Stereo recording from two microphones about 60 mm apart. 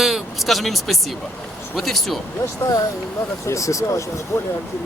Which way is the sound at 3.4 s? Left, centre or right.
Left.